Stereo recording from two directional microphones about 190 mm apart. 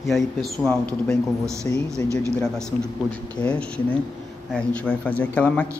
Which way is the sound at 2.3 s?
5° left (ahead or behind).